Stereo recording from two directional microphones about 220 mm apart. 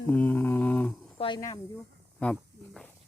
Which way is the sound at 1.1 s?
20° left (ahead or behind).